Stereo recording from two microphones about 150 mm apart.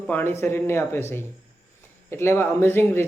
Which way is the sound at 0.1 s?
15° left (ahead or behind).